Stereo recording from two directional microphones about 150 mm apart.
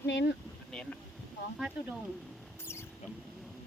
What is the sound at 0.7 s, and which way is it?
Speech, 5° left (ahead or behind).